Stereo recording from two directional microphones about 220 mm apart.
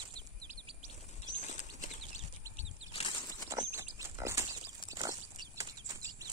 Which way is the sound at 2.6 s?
25° left (ahead or behind).